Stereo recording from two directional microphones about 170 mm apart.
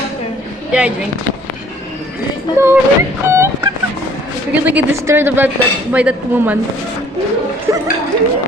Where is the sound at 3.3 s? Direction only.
15° right (ahead or behind).